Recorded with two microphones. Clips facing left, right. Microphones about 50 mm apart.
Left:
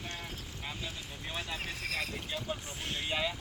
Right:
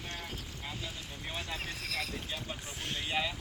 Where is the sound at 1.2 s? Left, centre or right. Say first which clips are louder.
Left 1 dB; centre.